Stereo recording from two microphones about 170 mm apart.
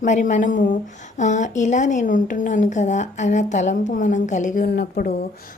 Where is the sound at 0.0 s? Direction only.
45° left (ahead or behind); by 5.1 s 65° left (ahead or behind).